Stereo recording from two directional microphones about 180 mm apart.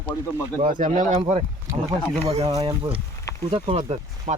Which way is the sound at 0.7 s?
45° right (ahead or behind).